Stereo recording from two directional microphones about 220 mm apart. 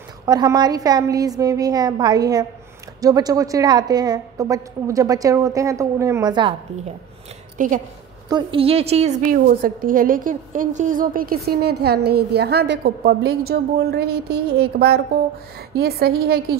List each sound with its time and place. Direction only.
0.2 s a woman's voice: 15° right (ahead or behind)
7.5 s a woman's voice: 35° right (ahead or behind)
8.3 s a woman's voice: 20° right (ahead or behind); by 16.5 s 45° right (ahead or behind)